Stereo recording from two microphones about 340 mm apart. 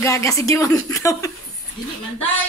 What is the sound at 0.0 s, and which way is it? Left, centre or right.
Speech, centre.